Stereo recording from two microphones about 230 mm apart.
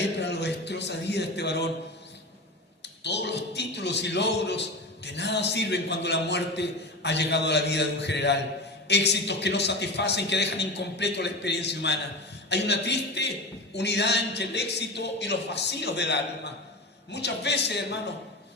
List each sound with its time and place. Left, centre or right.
0.0 s speech: left
2.8 s speech: left